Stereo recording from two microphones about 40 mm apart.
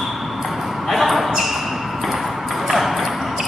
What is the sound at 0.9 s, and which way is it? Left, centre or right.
Basketball bounce, centre.